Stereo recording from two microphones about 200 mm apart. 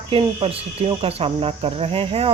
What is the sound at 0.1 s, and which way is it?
Speech, 25° right (ahead or behind).